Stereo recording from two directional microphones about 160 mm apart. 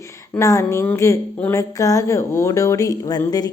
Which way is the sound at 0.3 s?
20° left (ahead or behind).